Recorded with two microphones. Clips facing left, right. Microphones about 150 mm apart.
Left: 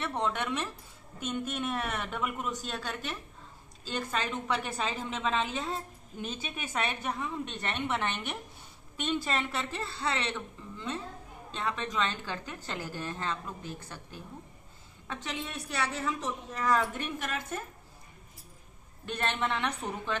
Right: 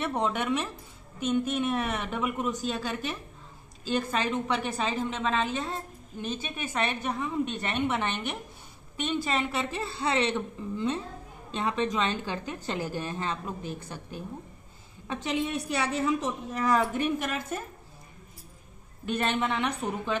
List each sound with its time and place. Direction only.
0.0 s a woman's voice: 10° right (ahead or behind)
6.4 s a woman's voice: 10° left (ahead or behind); by 17.6 s 5° right (ahead or behind)
19.0 s a woman's voice: 5° right (ahead or behind)